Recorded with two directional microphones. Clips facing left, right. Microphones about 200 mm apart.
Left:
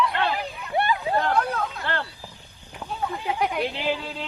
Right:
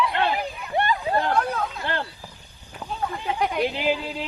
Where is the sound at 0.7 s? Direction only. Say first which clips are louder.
Even; 10° left (ahead or behind).